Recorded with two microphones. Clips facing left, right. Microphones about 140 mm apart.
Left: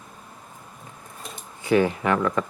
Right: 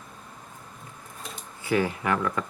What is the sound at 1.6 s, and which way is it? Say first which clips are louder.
Speech: left 5 dB; 20° left (ahead or behind).